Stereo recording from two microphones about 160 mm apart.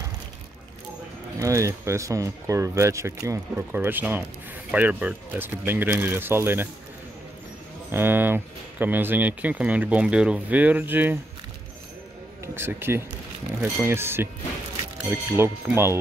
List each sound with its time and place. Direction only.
1.4 s speech: 20° right (ahead or behind)
7.9 s speech: 15° right (ahead or behind)
12.5 s speech: 15° right (ahead or behind)